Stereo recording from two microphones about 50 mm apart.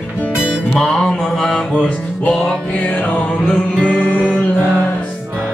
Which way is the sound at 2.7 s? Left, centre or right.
Left.